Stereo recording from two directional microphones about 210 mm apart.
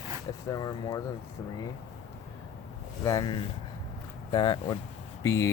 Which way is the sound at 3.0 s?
15° left (ahead or behind).